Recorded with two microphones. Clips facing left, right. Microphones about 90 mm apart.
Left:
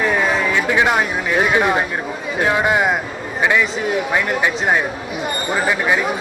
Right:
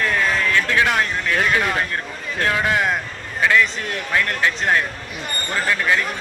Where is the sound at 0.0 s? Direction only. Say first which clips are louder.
Left 3 dB; 15° left (ahead or behind).